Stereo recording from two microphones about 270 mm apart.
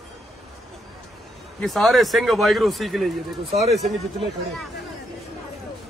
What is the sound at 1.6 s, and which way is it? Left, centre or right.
Speech, centre.